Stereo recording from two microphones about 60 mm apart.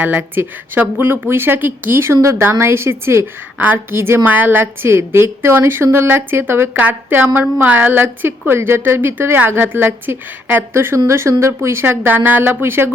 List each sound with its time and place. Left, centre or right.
0.0 s a woman's voice: right
4.3 s a woman's voice: right
6.7 s a woman's voice: right